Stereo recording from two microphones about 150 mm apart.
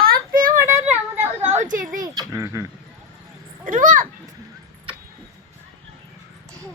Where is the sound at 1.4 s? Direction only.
50° right (ahead or behind).